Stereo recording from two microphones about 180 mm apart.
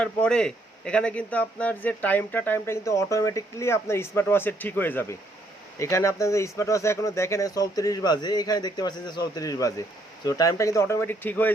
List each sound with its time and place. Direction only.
0.0 s a man's voice: 5° left (ahead or behind)